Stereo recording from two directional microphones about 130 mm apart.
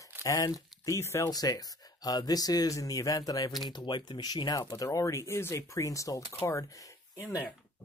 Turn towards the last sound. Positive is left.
turn(degrees=25)  # may be behind; listen again after turning